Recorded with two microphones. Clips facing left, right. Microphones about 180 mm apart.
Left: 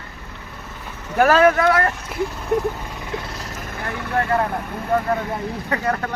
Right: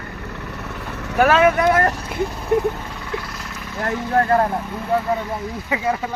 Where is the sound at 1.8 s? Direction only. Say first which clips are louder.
Right 2 dB; 40° right (ahead or behind).